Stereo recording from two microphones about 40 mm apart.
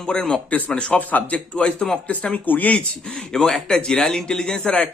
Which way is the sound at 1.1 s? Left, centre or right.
Left.